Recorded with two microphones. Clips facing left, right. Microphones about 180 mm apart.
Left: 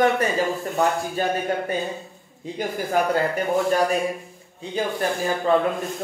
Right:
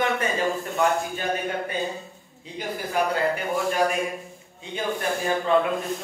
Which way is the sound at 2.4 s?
45° left (ahead or behind).